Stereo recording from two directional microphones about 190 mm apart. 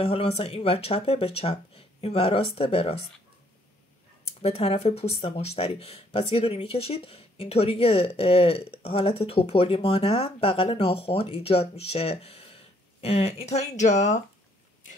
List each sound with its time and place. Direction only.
0.0 s speech: 30° left (ahead or behind)
4.4 s speech: 30° left (ahead or behind)